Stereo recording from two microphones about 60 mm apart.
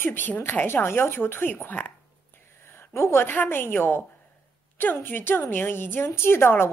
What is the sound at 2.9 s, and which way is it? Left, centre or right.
A woman's voice, left.